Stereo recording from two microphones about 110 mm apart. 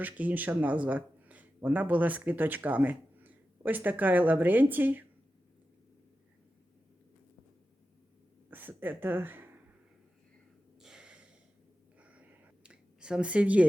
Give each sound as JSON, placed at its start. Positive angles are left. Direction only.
{"t": 0.0, "sound": "speech", "side_deg": -15}
{"t": 8.4, "sound": "speech", "side_deg": -15}
{"t": 10.8, "sound": "snort", "side_deg": -5}
{"t": 11.9, "sound": "a sound", "side_deg": -10}